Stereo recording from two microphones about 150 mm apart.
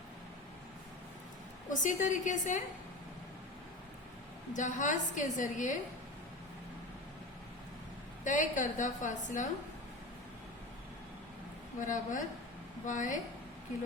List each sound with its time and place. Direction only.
1.7 s a woman's voice: 55° left (ahead or behind)
4.5 s a woman's voice: 55° left (ahead or behind)
8.2 s a woman's voice: 55° left (ahead or behind)
11.9 s a woman's voice: 60° left (ahead or behind)